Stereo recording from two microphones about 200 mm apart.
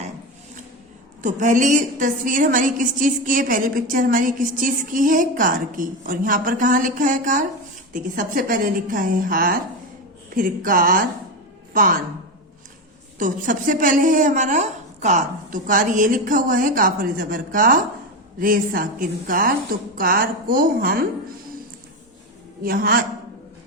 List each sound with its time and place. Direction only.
1.2 s a woman's voice: 40° right (ahead or behind)
13.1 s a woman's voice: 40° right (ahead or behind)
22.6 s a woman's voice: 45° right (ahead or behind)